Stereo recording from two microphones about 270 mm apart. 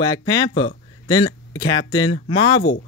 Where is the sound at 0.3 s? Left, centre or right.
Centre.